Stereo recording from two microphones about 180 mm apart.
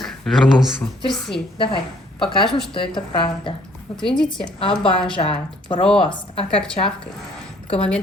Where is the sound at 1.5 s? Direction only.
30° left (ahead or behind).